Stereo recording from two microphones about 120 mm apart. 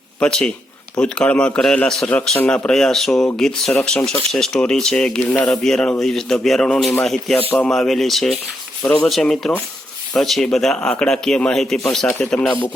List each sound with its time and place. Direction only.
0.2 s a man's voice: 5° left (ahead or behind)